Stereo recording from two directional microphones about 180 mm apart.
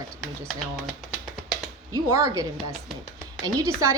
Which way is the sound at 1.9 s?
20° right (ahead or behind).